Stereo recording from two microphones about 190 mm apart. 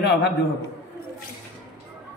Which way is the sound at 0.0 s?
60° left (ahead or behind).